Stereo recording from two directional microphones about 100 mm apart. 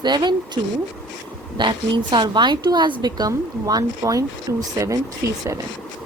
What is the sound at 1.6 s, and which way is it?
A woman's voice, 50° right (ahead or behind).